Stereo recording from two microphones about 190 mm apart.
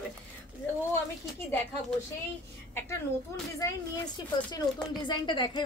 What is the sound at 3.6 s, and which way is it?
A woman's voice, 15° left (ahead or behind).